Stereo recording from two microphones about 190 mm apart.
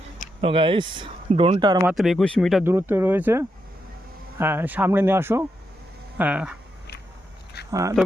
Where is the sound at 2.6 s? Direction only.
10° right (ahead or behind).